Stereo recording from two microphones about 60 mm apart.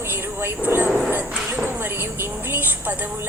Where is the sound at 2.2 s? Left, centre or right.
Right.